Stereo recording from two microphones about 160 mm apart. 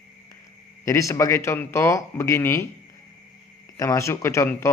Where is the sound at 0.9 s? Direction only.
20° left (ahead or behind).